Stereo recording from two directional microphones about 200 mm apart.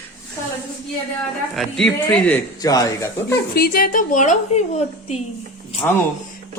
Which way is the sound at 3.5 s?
50° left (ahead or behind).